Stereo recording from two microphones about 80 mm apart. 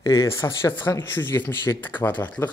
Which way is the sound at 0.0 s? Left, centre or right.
Left.